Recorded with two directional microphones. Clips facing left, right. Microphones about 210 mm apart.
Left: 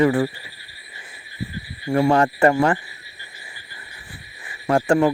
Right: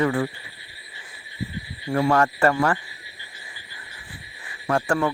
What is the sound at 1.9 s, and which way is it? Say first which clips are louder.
Speech: left 3 dB; 25° left (ahead or behind).